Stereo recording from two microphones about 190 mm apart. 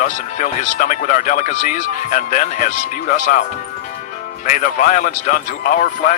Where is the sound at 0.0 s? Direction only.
40° left (ahead or behind).